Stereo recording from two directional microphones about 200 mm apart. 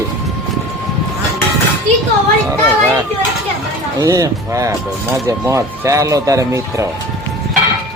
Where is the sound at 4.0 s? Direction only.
15° right (ahead or behind).